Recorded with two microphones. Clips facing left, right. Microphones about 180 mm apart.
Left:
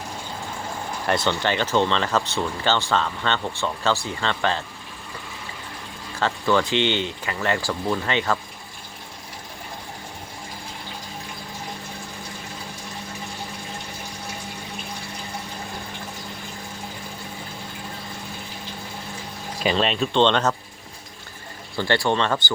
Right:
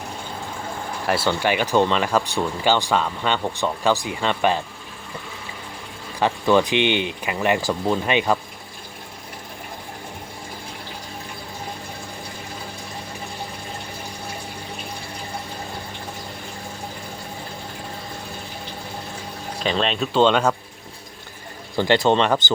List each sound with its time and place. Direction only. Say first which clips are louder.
1.0 s speech: right 2 dB; 5° right (ahead or behind)
6.1 s speech: right 3 dB; 15° right (ahead or behind)
19.6 s speech: left 1 dB; centre (ahead or behind)
21.8 s speech: right 4 dB; 20° right (ahead or behind)